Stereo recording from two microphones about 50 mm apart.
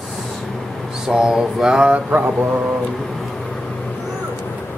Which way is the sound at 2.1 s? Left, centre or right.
Right.